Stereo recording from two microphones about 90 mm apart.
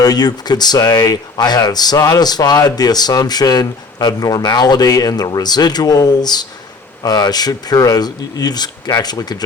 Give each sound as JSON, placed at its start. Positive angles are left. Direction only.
{"t": 0.0, "sound": "speech", "side_deg": 45}